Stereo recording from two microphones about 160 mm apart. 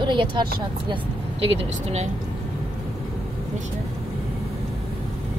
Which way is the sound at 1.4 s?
45° right (ahead or behind).